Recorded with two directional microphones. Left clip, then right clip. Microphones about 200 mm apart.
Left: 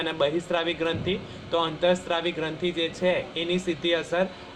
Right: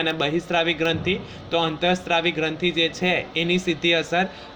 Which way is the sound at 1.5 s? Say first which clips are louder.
Right 2 dB; 40° right (ahead or behind).